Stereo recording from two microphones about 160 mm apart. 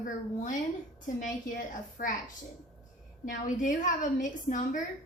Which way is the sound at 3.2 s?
55° left (ahead or behind).